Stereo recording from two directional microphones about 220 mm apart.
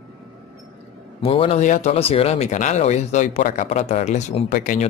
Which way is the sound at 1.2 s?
25° left (ahead or behind).